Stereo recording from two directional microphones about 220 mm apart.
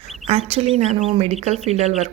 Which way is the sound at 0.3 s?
25° right (ahead or behind).